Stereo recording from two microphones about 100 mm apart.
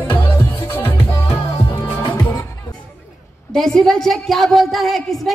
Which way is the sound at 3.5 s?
5° left (ahead or behind).